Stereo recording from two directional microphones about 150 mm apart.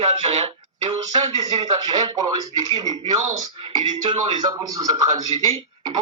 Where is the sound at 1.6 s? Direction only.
25° right (ahead or behind).